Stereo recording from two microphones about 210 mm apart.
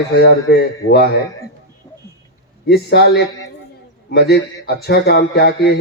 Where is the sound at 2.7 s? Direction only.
50° left (ahead or behind).